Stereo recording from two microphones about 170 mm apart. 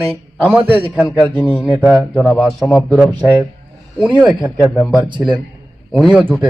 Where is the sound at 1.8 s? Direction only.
5° right (ahead or behind).